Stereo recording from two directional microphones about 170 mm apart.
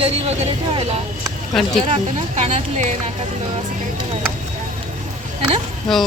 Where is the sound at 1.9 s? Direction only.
45° right (ahead or behind).